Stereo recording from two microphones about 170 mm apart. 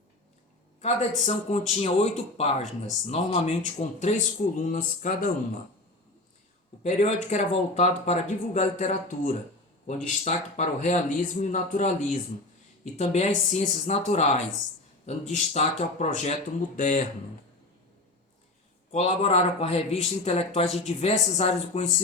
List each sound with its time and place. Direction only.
0.8 s speech: 45° left (ahead or behind)
6.8 s speech: 45° left (ahead or behind)
18.9 s a man's voice: 40° left (ahead or behind)